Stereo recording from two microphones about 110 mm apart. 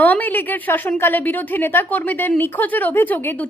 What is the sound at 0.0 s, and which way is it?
A woman's voice, 15° left (ahead or behind).